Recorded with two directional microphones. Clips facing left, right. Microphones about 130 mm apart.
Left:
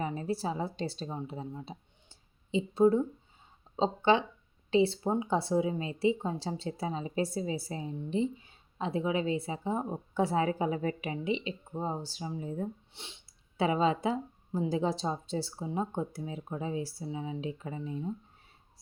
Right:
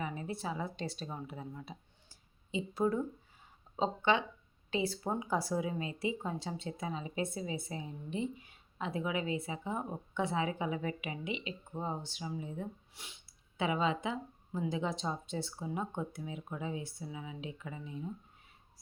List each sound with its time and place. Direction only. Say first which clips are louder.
0.0 s a woman's voice: left 6 dB; 35° left (ahead or behind)
12.9 s a woman's voice: left 4 dB; 30° left (ahead or behind)